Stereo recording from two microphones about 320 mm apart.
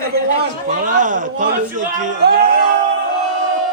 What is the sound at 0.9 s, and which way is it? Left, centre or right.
A man's voice, right.